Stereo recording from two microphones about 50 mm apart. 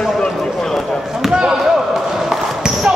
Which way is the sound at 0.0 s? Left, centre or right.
Centre.